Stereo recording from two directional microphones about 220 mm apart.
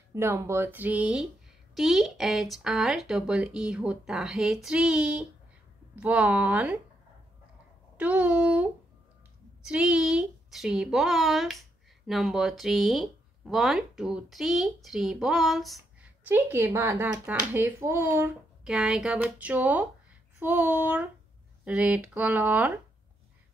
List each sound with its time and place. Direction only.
0.1 s speech: 10° right (ahead or behind)
8.0 s speech: 5° right (ahead or behind)